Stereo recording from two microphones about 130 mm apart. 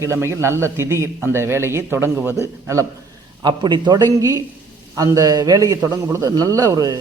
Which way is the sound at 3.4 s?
35° right (ahead or behind).